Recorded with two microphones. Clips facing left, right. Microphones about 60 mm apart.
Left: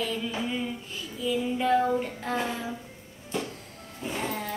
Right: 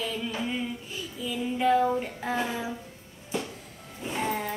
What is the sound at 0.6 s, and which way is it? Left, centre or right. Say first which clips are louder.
Child singing: even; centre.